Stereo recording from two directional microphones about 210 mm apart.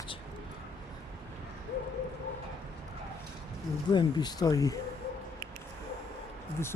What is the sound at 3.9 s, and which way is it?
Speech, 20° left (ahead or behind).